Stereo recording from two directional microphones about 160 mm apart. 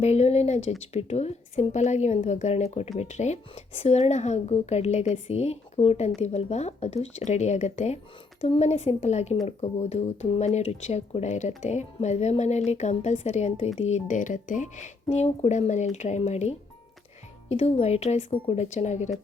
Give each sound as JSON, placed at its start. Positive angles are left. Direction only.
{"t": 0.0, "sound": "speech", "side_deg": 45}